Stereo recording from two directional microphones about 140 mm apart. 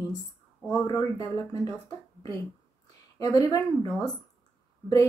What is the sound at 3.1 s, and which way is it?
Speech, 25° left (ahead or behind).